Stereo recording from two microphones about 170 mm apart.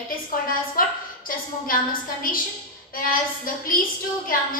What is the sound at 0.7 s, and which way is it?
A woman's voice, 55° left (ahead or behind).